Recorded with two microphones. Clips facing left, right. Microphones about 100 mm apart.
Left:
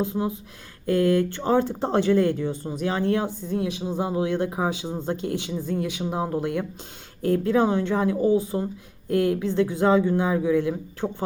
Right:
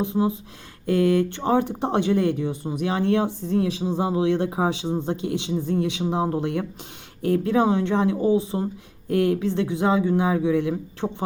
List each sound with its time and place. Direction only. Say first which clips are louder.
0.0 s speech: right 3 dB; 20° right (ahead or behind)